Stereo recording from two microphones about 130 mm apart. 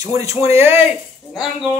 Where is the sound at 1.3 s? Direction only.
Centre (ahead or behind).